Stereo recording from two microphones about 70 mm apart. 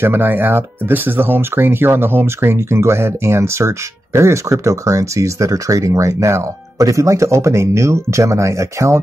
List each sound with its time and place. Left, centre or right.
0.0 s speech: right